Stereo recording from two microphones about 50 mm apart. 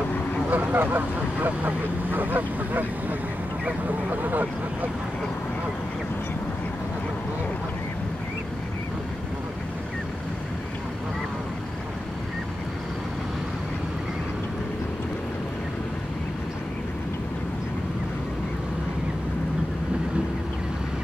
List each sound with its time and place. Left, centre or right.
0.5 s speech: right